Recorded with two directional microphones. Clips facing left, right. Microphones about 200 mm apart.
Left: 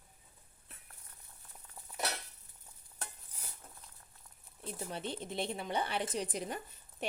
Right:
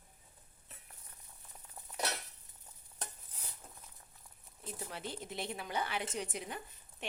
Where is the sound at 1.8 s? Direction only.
20° right (ahead or behind).